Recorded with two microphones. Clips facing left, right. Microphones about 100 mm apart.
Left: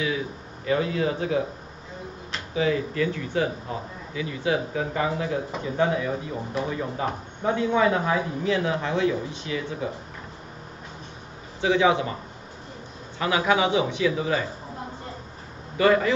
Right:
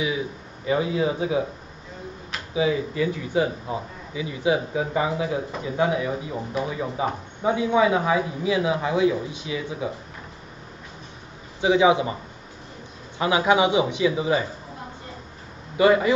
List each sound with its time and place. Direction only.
0.7 s speech: 15° right (ahead or behind)
2.5 s speech: 15° right (ahead or behind)
11.6 s speech: 15° right (ahead or behind)
13.2 s speech: 20° right (ahead or behind)
15.8 s speech: 15° right (ahead or behind)